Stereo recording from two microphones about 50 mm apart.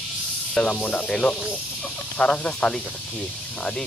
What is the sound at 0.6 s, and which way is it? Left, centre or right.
Speech, centre.